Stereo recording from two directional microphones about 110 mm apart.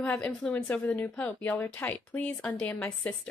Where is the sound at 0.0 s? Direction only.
10° left (ahead or behind).